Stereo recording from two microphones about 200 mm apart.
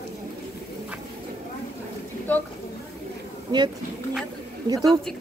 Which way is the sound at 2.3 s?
10° left (ahead or behind).